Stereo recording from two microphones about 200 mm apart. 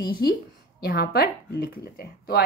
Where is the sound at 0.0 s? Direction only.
50° left (ahead or behind).